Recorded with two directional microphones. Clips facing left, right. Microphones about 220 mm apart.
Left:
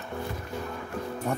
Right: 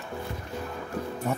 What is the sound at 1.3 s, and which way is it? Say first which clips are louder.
Music: even; 5° right (ahead or behind).